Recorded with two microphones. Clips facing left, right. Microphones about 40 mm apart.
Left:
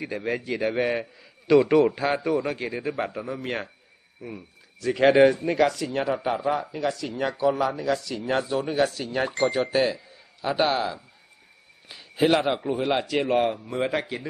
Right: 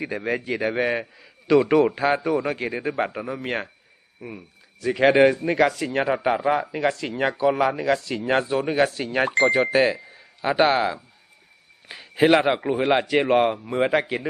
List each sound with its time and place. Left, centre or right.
0.0 s a man's voice: centre
5.9 s speech: right
9.5 s a man's voice: right